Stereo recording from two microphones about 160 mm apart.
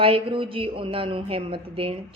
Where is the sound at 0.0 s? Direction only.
35° right (ahead or behind).